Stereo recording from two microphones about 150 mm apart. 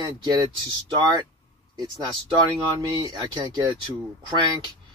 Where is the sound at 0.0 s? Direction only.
30° right (ahead or behind).